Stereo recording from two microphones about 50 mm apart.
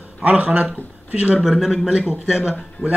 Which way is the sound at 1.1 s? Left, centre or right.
Right.